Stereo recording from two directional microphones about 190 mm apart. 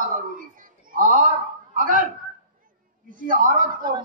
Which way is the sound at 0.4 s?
45° right (ahead or behind).